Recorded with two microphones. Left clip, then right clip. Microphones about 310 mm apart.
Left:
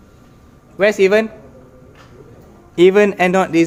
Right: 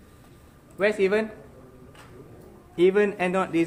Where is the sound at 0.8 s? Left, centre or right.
Left.